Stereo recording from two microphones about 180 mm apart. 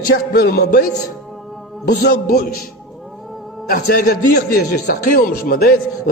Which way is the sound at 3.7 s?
60° left (ahead or behind).